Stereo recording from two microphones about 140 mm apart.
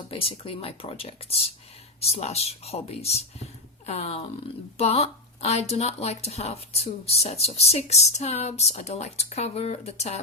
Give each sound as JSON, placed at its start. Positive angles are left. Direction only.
{"t": 0.1, "sound": "speech", "side_deg": 40}